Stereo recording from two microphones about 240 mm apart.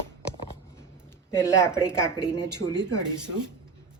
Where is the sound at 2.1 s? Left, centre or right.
Centre.